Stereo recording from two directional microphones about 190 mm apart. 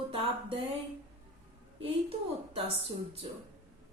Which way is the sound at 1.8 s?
30° right (ahead or behind).